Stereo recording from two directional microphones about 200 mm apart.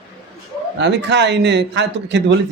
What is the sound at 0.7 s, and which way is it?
Speech, 60° right (ahead or behind).